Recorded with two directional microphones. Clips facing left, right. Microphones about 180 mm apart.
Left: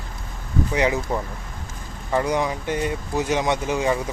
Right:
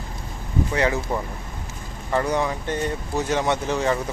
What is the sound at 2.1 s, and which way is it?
Speech, 10° left (ahead or behind).